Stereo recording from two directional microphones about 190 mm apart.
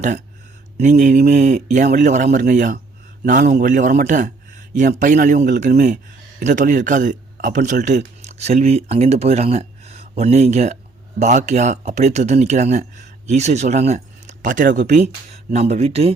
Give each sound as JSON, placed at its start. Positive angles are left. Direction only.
{"t": 0.8, "sound": "a man's voice", "side_deg": -40}